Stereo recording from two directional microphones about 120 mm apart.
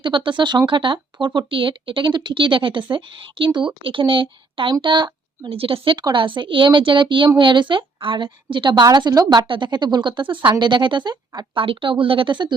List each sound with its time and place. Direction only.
0.0 s a woman's voice: 40° right (ahead or behind)